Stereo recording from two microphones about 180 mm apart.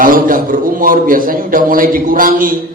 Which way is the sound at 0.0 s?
50° right (ahead or behind).